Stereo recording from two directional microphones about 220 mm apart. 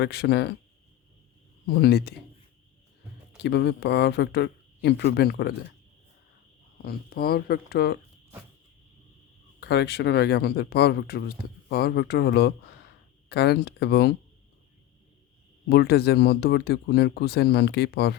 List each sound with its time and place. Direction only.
0.0 s speech: 50° left (ahead or behind)
1.6 s speech: 45° left (ahead or behind)
3.4 s speech: 50° left (ahead or behind)
6.8 s speech: 45° left (ahead or behind)
9.6 s speech: 50° left (ahead or behind)
15.7 s speech: 45° left (ahead or behind)